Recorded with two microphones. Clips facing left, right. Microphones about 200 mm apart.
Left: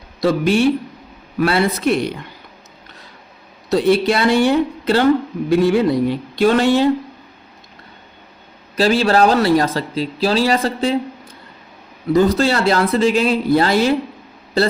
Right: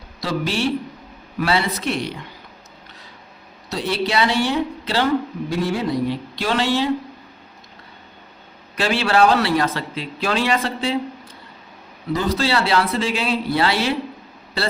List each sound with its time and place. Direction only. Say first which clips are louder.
0.2 s speech: left 8 dB; 55° left (ahead or behind)
3.7 s speech: left 8 dB; 55° left (ahead or behind)
8.7 s speech: left 5 dB; 40° left (ahead or behind)
12.1 s speech: left 6 dB; 50° left (ahead or behind)